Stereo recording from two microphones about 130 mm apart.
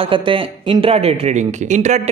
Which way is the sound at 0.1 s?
40° right (ahead or behind).